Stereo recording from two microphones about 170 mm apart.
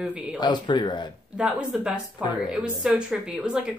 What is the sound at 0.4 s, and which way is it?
Speech, 25° left (ahead or behind).